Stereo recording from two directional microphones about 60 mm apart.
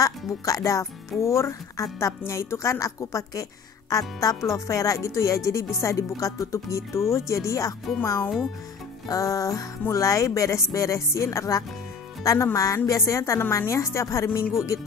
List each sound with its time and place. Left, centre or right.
0.0 s speech: left